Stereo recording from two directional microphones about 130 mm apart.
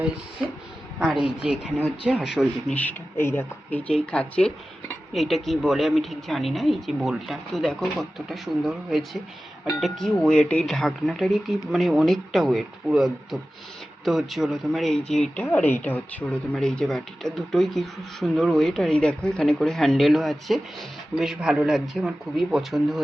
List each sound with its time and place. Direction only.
0.9 s speech: 5° right (ahead or behind)
2.6 s speech: 10° left (ahead or behind)